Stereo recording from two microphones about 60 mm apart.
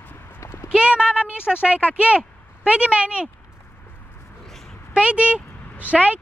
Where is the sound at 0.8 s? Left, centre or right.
Centre.